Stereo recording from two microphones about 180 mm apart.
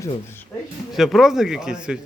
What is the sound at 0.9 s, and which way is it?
Speech, centre (ahead or behind).